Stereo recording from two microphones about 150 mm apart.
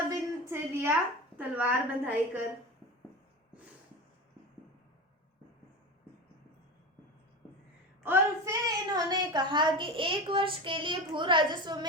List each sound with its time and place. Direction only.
0.1 s a sound: 20° right (ahead or behind)
1.4 s a woman's voice: 10° right (ahead or behind)
8.0 s a woman's voice: 20° right (ahead or behind)